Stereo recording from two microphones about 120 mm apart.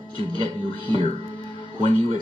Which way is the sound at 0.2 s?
45° right (ahead or behind).